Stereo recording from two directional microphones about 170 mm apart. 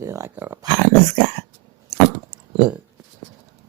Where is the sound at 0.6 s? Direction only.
25° right (ahead or behind).